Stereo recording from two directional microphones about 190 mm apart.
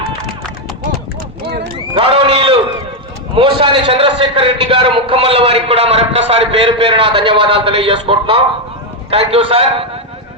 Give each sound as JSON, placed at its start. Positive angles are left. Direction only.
{"t": 2.0, "sound": "sheep", "side_deg": -30}
{"t": 3.3, "sound": "a man's voice", "side_deg": -25}